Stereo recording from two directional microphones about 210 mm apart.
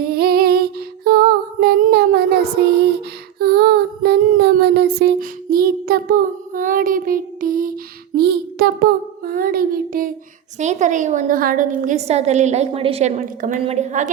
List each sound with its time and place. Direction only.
0.0 s music: 45° right (ahead or behind)
3.3 s child singing: 50° right (ahead or behind)
10.6 s a woman's voice: 35° right (ahead or behind)